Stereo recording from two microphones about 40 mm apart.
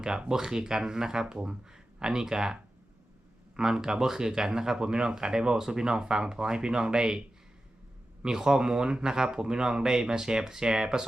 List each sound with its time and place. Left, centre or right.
0.0 s speech: centre
3.6 s speech: centre
8.2 s speech: centre